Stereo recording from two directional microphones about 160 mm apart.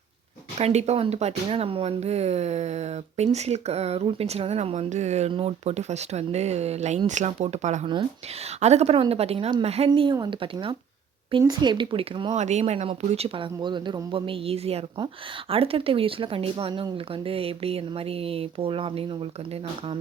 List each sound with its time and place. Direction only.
0.6 s speech: 45° right (ahead or behind)
12.4 s speech: 45° right (ahead or behind)